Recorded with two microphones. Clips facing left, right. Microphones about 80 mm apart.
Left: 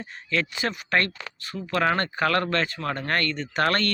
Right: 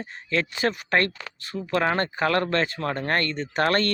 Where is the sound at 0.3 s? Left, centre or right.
Right.